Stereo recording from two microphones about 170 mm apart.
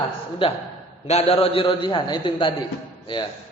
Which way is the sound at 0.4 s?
30° left (ahead or behind).